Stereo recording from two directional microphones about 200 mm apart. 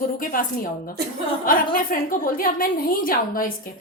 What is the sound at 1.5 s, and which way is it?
A woman's voice, 45° left (ahead or behind).